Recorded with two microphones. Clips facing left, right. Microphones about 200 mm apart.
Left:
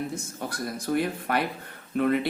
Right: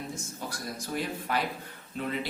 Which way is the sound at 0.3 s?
60° left (ahead or behind).